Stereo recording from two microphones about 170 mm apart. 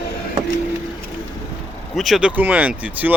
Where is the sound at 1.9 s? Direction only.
Centre (ahead or behind).